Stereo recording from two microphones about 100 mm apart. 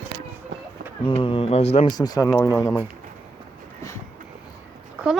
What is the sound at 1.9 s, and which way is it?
Speech, 40° left (ahead or behind).